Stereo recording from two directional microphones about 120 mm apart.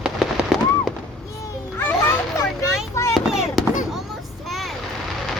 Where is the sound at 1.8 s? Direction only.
20° left (ahead or behind).